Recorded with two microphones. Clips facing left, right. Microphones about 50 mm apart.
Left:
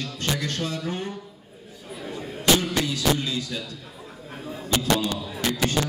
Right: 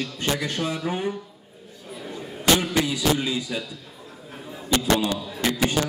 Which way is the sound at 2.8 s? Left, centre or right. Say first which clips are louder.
Right 1 dB; centre.